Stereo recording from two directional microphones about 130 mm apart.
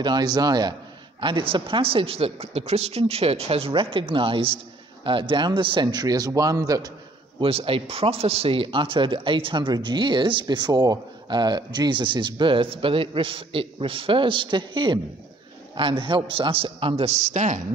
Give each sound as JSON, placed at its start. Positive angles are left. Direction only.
{"t": 0.0, "sound": "speech", "side_deg": -30}
{"t": 1.2, "sound": "speech", "side_deg": -40}
{"t": 7.3, "sound": "speech", "side_deg": -45}